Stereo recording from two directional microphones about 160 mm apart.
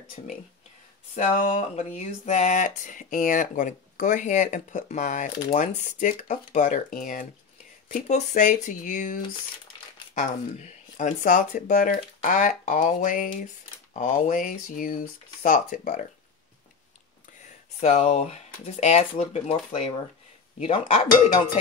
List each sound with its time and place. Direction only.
0.2 s a sound: 45° left (ahead or behind)
13.9 s speech: 50° left (ahead or behind)
17.4 s speech: 50° left (ahead or behind)
21.1 s speech: 55° left (ahead or behind)